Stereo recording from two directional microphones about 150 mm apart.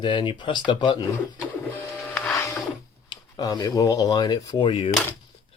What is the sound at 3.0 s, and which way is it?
Speech, 25° left (ahead or behind).